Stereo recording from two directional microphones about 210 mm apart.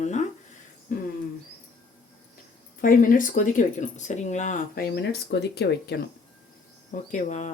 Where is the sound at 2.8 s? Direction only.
40° left (ahead or behind).